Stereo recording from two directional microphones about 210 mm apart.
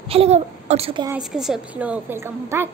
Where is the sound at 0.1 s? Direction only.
30° right (ahead or behind).